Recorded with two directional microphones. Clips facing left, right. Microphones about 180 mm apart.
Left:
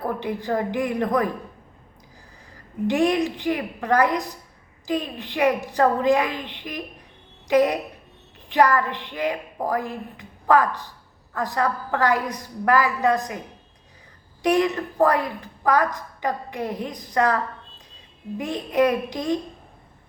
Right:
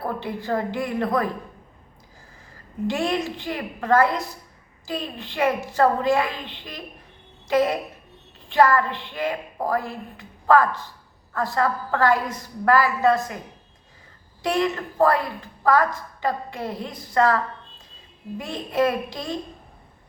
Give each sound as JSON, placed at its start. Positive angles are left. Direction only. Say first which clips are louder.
{"t": 0.2, "sound": "a woman's voice", "louder": "left 1 dB", "side_deg": 15}
{"t": 2.8, "sound": "a woman's voice", "louder": "left 4 dB", "side_deg": 15}
{"t": 14.4, "sound": "a woman's voice", "louder": "left 3 dB", "side_deg": 15}